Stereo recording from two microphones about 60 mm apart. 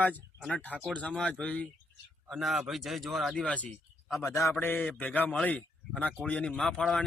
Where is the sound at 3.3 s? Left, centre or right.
Left.